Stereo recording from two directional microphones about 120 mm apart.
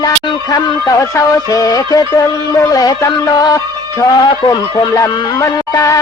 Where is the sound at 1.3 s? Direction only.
30° left (ahead or behind).